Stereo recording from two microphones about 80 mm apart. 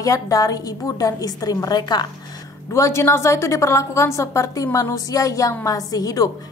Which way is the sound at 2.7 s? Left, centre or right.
Left.